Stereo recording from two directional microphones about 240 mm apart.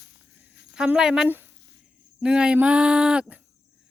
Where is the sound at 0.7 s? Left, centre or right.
Centre.